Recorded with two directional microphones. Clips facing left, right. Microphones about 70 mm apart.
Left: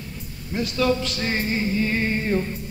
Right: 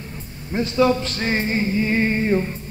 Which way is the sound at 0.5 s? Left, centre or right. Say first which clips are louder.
Right 4 dB; right.